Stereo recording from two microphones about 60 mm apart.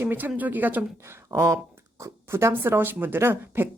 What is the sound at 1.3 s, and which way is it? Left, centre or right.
Speech, right.